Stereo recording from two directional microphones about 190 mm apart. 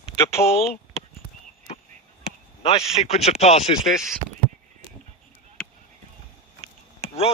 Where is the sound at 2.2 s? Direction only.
30° left (ahead or behind).